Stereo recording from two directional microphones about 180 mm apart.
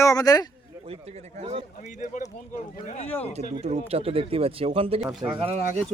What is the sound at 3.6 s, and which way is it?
Speech, 35° right (ahead or behind).